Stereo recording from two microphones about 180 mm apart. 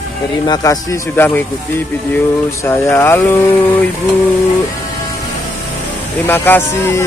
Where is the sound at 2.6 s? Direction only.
15° left (ahead or behind).